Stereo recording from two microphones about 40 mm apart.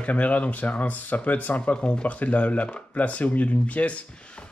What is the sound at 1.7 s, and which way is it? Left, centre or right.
Speech, left.